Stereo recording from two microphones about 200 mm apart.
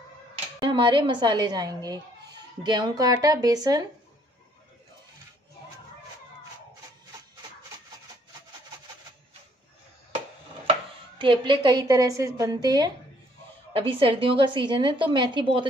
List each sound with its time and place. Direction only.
0.6 s a woman's voice: 25° right (ahead or behind)
10.7 s a woman's voice: 25° right (ahead or behind)